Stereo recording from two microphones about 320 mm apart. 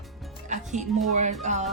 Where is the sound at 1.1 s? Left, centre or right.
Right.